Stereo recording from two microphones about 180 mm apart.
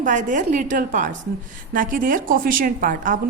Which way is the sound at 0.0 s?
45° right (ahead or behind).